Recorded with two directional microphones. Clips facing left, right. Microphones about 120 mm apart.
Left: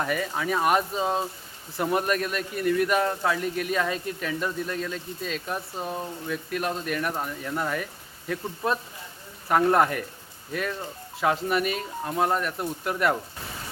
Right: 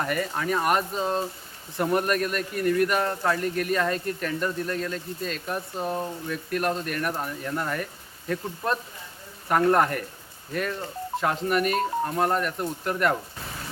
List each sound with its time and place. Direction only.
0.0 s a man's voice: centre (ahead or behind)